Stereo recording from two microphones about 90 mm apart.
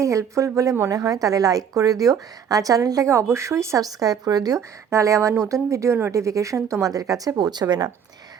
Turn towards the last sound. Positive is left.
turn(degrees=-50)  # may be behind; listen again after turning